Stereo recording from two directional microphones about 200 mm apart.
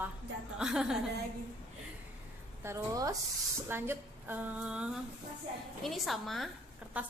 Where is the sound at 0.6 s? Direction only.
5° right (ahead or behind).